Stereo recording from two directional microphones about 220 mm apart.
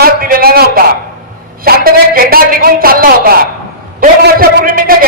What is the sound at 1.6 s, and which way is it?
A man's voice, 40° right (ahead or behind).